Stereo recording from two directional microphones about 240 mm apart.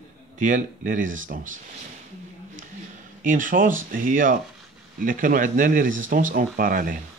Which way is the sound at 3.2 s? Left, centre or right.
Right.